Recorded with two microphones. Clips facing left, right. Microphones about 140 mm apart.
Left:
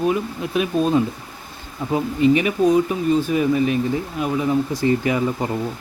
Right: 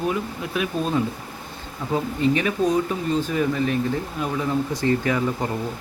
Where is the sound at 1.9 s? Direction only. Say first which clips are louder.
Left 4 dB; 15° left (ahead or behind).